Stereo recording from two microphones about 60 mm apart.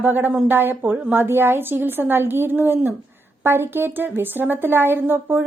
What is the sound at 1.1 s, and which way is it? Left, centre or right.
Speech, right.